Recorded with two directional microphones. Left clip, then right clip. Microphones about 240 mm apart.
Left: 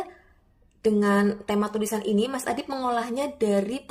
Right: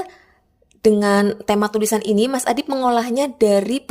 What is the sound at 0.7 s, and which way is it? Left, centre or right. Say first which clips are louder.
A woman's voice: right 8 dB; right.